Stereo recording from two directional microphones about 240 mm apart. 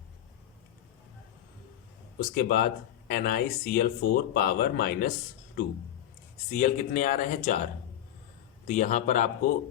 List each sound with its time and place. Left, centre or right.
2.3 s speech: left
6.5 s speech: left
8.6 s speech: left